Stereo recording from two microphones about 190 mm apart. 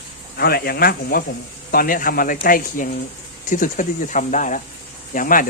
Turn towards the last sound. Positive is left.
turn(degrees=45)  # may be behind; listen again after turning